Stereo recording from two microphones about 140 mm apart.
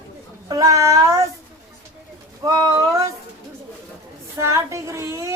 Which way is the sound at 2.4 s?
25° right (ahead or behind).